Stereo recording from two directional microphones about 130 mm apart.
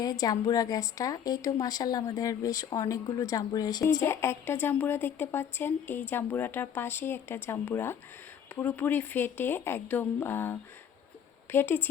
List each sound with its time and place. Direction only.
0.0 s a woman's voice: 30° left (ahead or behind)